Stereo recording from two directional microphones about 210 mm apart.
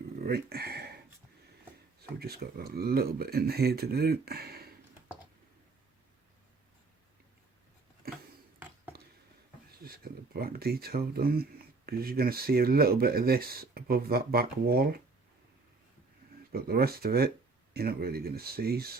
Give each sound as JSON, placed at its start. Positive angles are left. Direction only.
{"t": 0.2, "sound": "speech", "side_deg": -50}
{"t": 2.1, "sound": "speech", "side_deg": -50}
{"t": 9.8, "sound": "speech", "side_deg": -45}
{"t": 16.5, "sound": "speech", "side_deg": -45}